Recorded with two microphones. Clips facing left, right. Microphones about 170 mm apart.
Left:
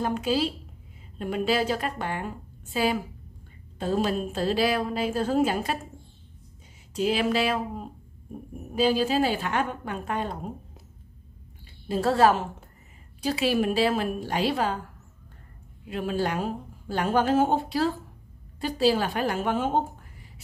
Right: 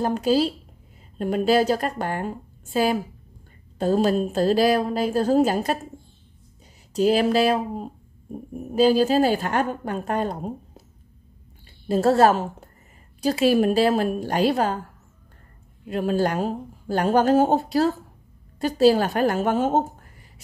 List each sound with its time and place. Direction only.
0.0 s a woman's voice: 40° right (ahead or behind)
6.9 s speech: 40° right (ahead or behind)
11.9 s a woman's voice: 45° right (ahead or behind)
15.8 s a woman's voice: 40° right (ahead or behind)